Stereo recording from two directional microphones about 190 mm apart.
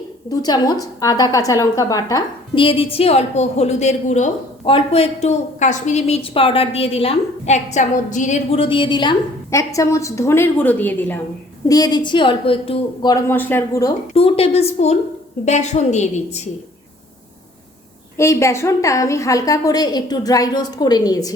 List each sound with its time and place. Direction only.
0.3 s a woman's voice: 20° left (ahead or behind)
11.7 s a woman's voice: 20° left (ahead or behind)
14.1 s a woman's voice: 30° left (ahead or behind)
18.2 s a woman's voice: 15° left (ahead or behind)